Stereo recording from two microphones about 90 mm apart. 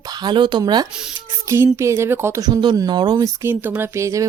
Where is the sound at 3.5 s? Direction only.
25° right (ahead or behind).